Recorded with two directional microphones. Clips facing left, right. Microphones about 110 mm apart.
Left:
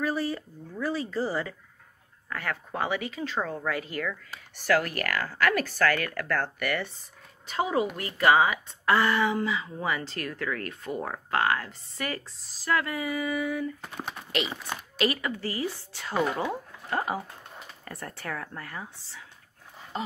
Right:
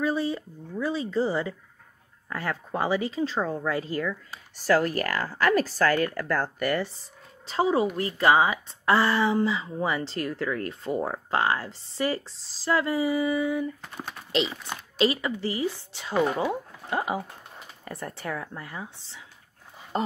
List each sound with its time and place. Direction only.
0.0 s speech: 20° right (ahead or behind)
13.8 s speech: 5° left (ahead or behind)
15.0 s speech: 20° right (ahead or behind)